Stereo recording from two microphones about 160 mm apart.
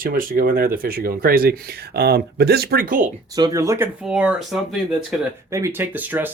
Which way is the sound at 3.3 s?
20° right (ahead or behind).